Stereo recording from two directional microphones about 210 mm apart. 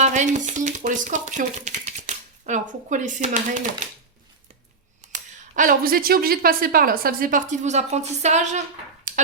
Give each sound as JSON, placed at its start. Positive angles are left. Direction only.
{"t": 0.0, "sound": "speech", "side_deg": -35}
{"t": 5.5, "sound": "a woman's voice", "side_deg": -40}